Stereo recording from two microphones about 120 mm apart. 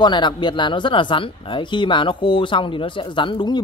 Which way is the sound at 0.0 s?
40° left (ahead or behind).